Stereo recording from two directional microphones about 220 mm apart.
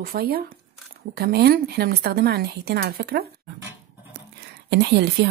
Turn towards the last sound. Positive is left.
turn(degrees=-50)  # may be behind; listen again after turning